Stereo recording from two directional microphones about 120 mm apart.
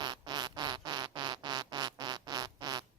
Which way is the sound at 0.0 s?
35° right (ahead or behind).